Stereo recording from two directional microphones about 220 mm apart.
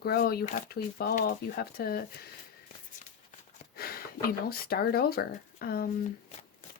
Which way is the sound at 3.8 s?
45° left (ahead or behind).